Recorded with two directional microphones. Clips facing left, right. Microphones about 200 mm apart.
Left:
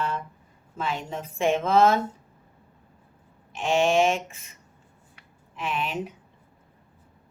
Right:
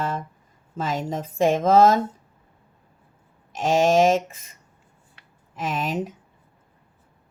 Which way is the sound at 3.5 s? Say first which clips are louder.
Right 3 dB; 40° right (ahead or behind).